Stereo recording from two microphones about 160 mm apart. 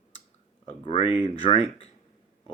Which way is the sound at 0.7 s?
40° left (ahead or behind).